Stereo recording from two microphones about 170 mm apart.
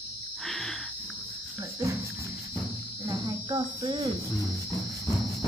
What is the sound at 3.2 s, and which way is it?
Speech, 25° right (ahead or behind).